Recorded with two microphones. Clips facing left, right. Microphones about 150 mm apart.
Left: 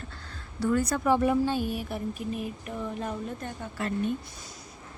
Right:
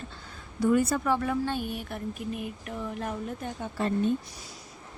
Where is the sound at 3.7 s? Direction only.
25° right (ahead or behind).